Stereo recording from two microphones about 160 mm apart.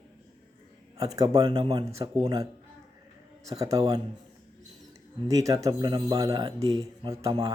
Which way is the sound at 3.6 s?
20° right (ahead or behind).